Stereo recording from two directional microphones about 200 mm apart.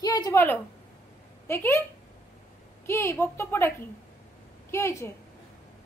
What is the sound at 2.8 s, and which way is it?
A woman's voice, 10° left (ahead or behind).